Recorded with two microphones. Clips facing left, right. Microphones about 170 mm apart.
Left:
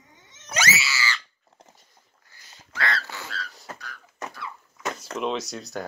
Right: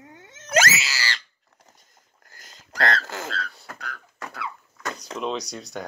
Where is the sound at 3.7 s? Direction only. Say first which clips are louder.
Right 5 dB; 60° right (ahead or behind).